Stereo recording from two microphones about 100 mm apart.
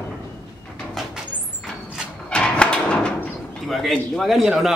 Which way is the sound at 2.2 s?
10° left (ahead or behind).